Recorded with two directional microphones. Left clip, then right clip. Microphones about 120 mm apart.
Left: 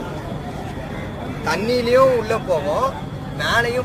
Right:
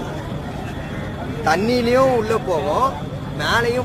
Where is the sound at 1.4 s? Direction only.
45° right (ahead or behind); by 3.7 s 30° right (ahead or behind).